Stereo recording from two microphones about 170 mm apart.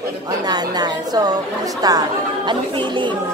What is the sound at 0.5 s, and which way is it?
A woman's voice, 25° right (ahead or behind).